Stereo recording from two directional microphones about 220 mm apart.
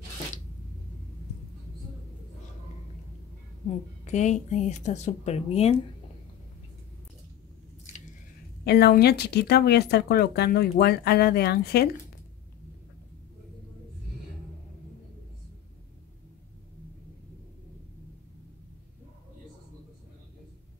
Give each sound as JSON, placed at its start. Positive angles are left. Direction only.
{"t": 4.0, "sound": "a woman's voice", "side_deg": 30}
{"t": 8.6, "sound": "speech", "side_deg": 45}